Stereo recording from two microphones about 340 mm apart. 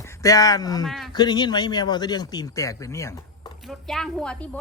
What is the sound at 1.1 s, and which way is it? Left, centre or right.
Speech, centre.